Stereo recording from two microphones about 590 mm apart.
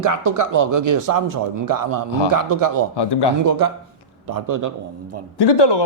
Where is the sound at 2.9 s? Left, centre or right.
Left.